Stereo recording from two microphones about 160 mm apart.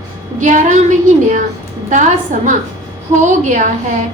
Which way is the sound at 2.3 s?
55° right (ahead or behind).